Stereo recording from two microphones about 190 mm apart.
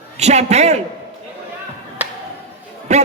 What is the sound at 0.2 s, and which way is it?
Speech, 35° right (ahead or behind).